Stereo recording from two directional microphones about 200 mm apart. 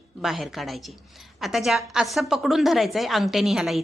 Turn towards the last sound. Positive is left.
turn(degrees=0)  # may be behind; listen again after turning